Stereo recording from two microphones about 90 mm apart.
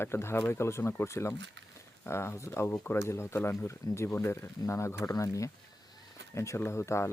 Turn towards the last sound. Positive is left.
turn(degrees=30)  # may be behind; listen again after turning